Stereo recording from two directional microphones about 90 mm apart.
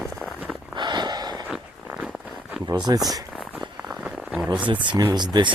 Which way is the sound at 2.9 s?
50° right (ahead or behind).